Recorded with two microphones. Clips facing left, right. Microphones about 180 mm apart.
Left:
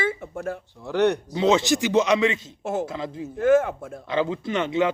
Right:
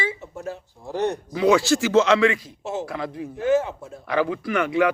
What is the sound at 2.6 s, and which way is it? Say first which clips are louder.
Speech: left 5 dB; 50° left (ahead or behind).